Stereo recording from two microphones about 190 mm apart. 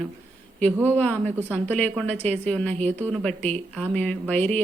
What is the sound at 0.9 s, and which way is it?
Speech, 10° left (ahead or behind).